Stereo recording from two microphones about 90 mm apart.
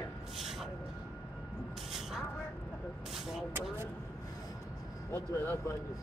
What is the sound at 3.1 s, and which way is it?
Vehicle, 5° right (ahead or behind).